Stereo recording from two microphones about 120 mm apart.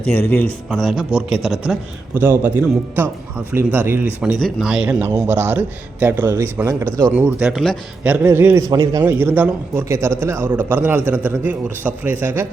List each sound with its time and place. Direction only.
0.0 s speech: 15° left (ahead or behind)
0.7 s a man's voice: centre (ahead or behind)
2.1 s a man's voice: 15° right (ahead or behind)
4.4 s a man's voice: centre (ahead or behind); by 8.6 s 20° right (ahead or behind)
8.6 s speech: 30° right (ahead or behind)
9.0 s a man's voice: 15° right (ahead or behind)